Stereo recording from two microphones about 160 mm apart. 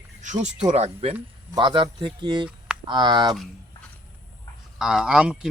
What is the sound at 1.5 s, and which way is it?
Speech, 30° right (ahead or behind).